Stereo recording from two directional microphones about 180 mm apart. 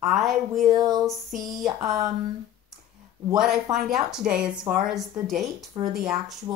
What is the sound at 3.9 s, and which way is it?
Speech, 5° right (ahead or behind).